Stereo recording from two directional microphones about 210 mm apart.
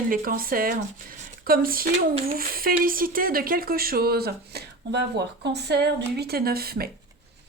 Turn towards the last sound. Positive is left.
turn(degrees=-45)  # may be behind; listen again after turning